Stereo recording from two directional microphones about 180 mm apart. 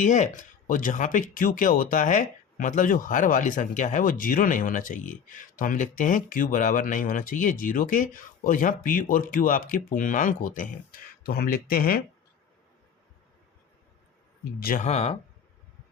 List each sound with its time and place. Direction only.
0.0 s speech: 45° left (ahead or behind)
11.2 s speech: 60° left (ahead or behind)
14.6 s speech: 55° left (ahead or behind)
14.8 s speech: 35° left (ahead or behind)